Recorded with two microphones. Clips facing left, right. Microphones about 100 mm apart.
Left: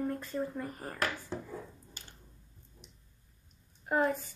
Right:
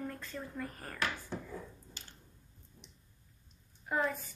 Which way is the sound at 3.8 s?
35° left (ahead or behind).